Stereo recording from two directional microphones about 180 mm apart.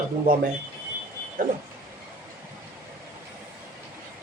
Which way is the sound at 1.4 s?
50° right (ahead or behind).